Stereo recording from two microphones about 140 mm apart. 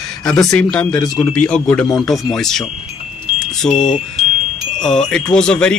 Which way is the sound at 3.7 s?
60° left (ahead or behind).